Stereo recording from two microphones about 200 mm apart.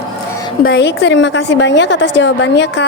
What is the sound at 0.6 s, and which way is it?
A woman's voice, 70° left (ahead or behind).